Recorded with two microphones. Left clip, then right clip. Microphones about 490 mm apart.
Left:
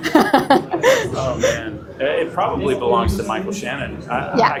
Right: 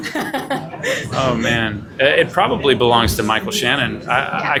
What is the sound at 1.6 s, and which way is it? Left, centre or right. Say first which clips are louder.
Speech: right 6 dB; right.